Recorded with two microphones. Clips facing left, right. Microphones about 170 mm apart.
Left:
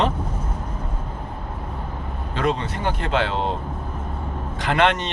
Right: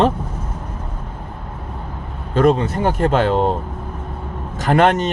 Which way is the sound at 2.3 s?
45° right (ahead or behind).